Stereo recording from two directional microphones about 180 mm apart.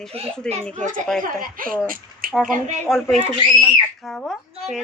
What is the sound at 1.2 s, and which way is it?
Speech, 50° right (ahead or behind).